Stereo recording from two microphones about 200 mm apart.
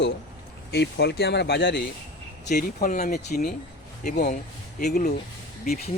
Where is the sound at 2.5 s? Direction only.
45° left (ahead or behind).